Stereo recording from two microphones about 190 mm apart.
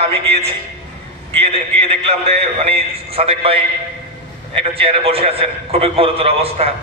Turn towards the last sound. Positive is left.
turn(degrees=-30)  # may be behind; listen again after turning